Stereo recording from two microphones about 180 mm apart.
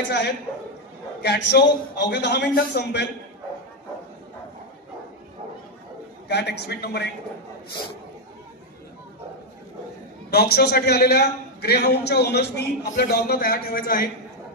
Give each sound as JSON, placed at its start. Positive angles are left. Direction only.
{"t": 1.2, "sound": "a man's voice", "side_deg": 65}
{"t": 6.2, "sound": "a man's voice", "side_deg": 70}
{"t": 10.3, "sound": "a man's voice", "side_deg": 65}